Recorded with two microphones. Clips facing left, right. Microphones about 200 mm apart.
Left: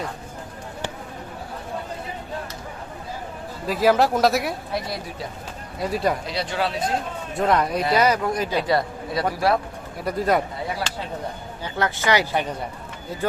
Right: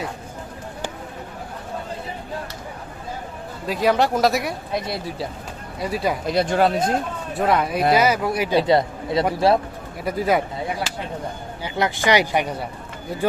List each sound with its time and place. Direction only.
3.7 s speech: centre (ahead or behind)
5.8 s speech: centre (ahead or behind)
6.2 s speech: 50° right (ahead or behind)
7.3 s speech: 5° right (ahead or behind)
8.5 s a man's voice: 25° right (ahead or behind)
10.0 s speech: 5° right (ahead or behind)
11.6 s speech: 15° right (ahead or behind)